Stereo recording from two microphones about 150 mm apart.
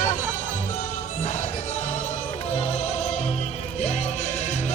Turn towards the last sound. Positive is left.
turn(degrees=50)  # may be behind; listen again after turning